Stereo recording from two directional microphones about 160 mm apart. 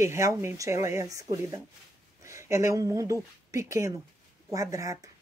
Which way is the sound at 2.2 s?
20° right (ahead or behind).